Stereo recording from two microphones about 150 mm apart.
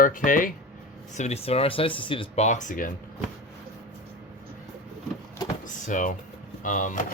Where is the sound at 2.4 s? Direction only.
55° left (ahead or behind).